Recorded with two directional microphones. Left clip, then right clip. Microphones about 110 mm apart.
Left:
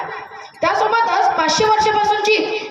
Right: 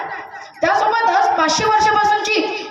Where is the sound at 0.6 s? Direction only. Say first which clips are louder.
Right 1 dB; 20° left (ahead or behind).